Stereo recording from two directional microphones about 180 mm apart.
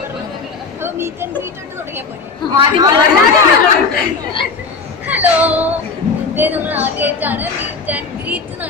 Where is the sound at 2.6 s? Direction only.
25° right (ahead or behind).